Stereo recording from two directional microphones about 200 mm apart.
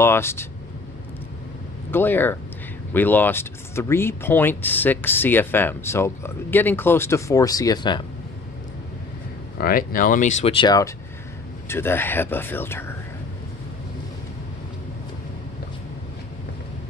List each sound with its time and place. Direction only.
0.0 s speech: 10° left (ahead or behind)
1.9 s speech: 10° left (ahead or behind)
9.6 s speech: 45° left (ahead or behind); by 10.9 s 20° left (ahead or behind)
11.7 s speech: 10° left (ahead or behind)